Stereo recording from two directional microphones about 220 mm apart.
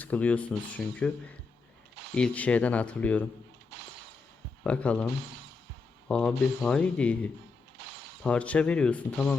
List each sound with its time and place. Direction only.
0.0 s speech: 5° left (ahead or behind)
2.1 s speech: 5° left (ahead or behind)
4.6 s speech: 5° left (ahead or behind)
6.1 s speech: 5° left (ahead or behind)
7.8 s shatter: 50° right (ahead or behind)
8.2 s speech: 5° left (ahead or behind)